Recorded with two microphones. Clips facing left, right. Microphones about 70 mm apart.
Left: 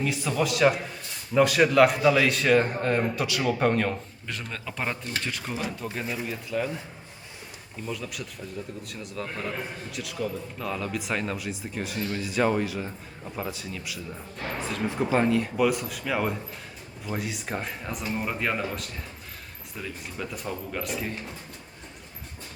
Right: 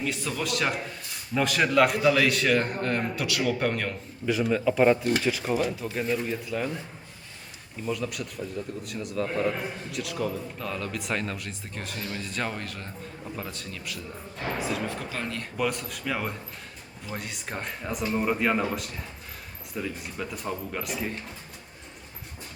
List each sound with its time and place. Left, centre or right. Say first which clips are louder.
0.0 s a man's voice: left 4 dB; centre
3.4 s a man's voice: left 4 dB; centre
4.3 s a man's voice: right 12 dB; centre
7.9 s a man's voice: right 4 dB; centre
14.8 s speech: left 9 dB; left
15.3 s a man's voice: left 6 dB; centre